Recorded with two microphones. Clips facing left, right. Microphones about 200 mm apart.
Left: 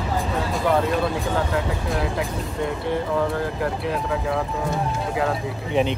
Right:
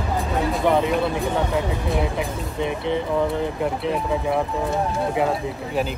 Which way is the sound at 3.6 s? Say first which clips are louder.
Right 2 dB; 25° right (ahead or behind).